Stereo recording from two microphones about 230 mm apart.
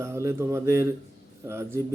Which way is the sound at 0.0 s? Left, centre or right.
Centre.